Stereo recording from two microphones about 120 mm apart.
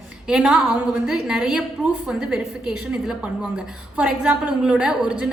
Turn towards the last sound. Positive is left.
turn(degrees=-5)  # may be behind; listen again after turning